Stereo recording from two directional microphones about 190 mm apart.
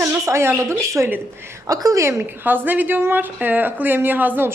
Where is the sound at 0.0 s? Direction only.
15° right (ahead or behind).